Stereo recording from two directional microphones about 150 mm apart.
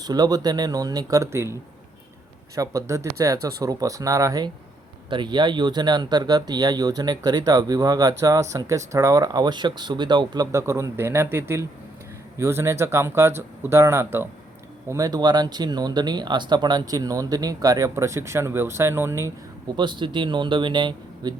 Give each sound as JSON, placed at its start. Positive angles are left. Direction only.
{"t": 0.0, "sound": "speech", "side_deg": -25}
{"t": 2.6, "sound": "speech", "side_deg": -20}
{"t": 19.7, "sound": "speech", "side_deg": -30}